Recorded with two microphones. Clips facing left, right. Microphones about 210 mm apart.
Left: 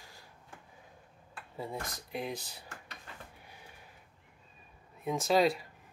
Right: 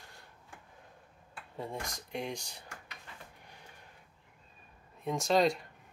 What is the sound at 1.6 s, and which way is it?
Speech, centre (ahead or behind).